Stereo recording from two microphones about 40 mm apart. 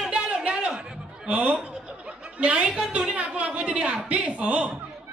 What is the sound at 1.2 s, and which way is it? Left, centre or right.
A woman's voice, right.